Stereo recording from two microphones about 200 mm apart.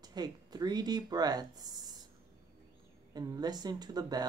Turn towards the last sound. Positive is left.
turn(degrees=-20)  # may be behind; listen again after turning